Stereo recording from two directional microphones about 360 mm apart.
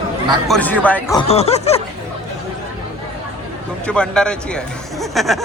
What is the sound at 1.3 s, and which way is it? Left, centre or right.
Speech, centre.